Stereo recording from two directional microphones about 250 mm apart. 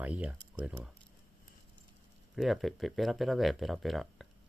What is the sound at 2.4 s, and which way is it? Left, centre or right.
Speech, centre.